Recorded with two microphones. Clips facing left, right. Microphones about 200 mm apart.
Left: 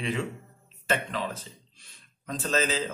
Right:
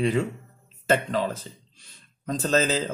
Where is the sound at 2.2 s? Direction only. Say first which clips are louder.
Right 5 dB; 35° right (ahead or behind).